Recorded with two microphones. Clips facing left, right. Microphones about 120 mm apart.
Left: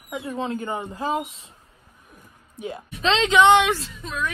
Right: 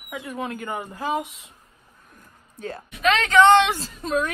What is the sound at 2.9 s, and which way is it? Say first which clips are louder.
Speech: even; 25° left (ahead or behind).